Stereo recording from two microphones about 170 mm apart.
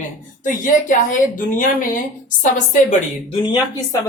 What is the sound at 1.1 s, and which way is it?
Speech, 50° left (ahead or behind).